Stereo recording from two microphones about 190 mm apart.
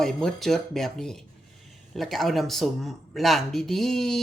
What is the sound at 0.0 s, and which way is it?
Speech, centre (ahead or behind).